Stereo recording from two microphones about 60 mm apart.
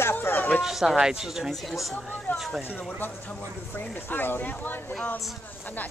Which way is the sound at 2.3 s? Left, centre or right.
Left.